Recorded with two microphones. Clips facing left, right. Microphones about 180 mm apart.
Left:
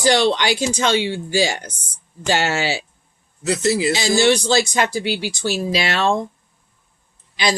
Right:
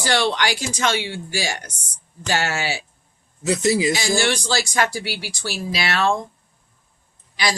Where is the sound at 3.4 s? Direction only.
15° right (ahead or behind).